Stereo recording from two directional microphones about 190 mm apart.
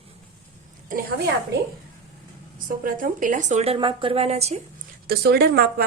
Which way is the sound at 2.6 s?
45° right (ahead or behind).